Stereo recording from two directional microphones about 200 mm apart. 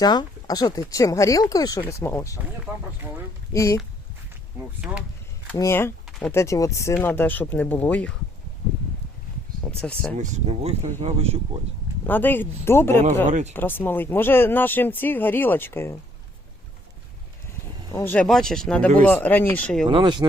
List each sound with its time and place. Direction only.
0.0 s speech: 20° left (ahead or behind)
2.7 s speech: 5° right (ahead or behind)
3.5 s speech: 15° left (ahead or behind)
5.5 s speech: 10° left (ahead or behind)
6.1 s a sound: centre (ahead or behind)
6.3 s speech: 15° left (ahead or behind)
9.8 s speech: 5° left (ahead or behind)
10.2 s speech: 35° right (ahead or behind)
12.0 s speech: 10° left (ahead or behind)
13.2 s speech: 35° right (ahead or behind)
13.5 s speech: 10° left (ahead or behind)
17.9 s speech: 10° left (ahead or behind)
19.9 s speech: 25° right (ahead or behind)